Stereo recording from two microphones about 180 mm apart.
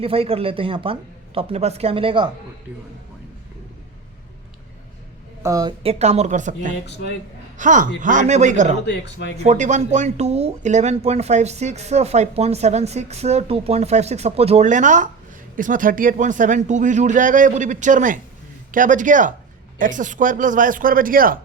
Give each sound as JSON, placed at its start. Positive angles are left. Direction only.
{"t": 0.0, "sound": "speech", "side_deg": -30}
{"t": 5.4, "sound": "a woman's voice", "side_deg": -20}
{"t": 5.8, "sound": "speech", "side_deg": -35}
{"t": 6.8, "sound": "speech", "side_deg": 70}
{"t": 7.6, "sound": "speech", "side_deg": -45}
{"t": 8.9, "sound": "speech", "side_deg": 70}
{"t": 9.4, "sound": "speech", "side_deg": -40}